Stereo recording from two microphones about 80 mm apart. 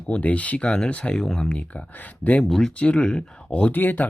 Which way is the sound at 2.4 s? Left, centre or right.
Centre.